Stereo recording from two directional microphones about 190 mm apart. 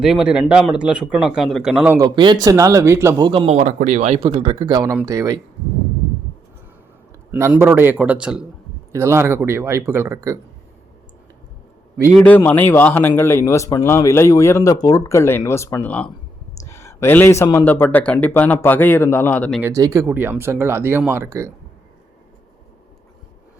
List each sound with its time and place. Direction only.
0.0 s speech: 5° right (ahead or behind)
2.0 s speech: 25° right (ahead or behind)
7.3 s speech: 10° right (ahead or behind)
12.1 s speech: 5° left (ahead or behind)
16.6 s a sound: 15° left (ahead or behind)
17.7 s speech: 10° left (ahead or behind)
19.6 s speech: 15° right (ahead or behind)